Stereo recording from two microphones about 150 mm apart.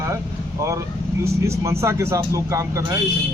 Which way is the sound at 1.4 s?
20° right (ahead or behind).